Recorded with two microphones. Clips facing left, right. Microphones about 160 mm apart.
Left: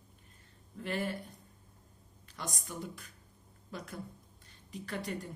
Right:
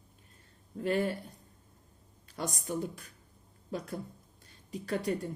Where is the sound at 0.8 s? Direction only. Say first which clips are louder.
Right 6 dB; 40° right (ahead or behind).